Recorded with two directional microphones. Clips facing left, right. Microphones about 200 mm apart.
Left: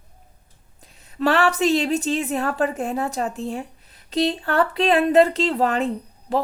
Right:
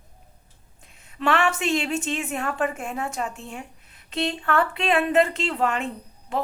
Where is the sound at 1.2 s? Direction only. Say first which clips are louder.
Left 4 dB; 35° left (ahead or behind).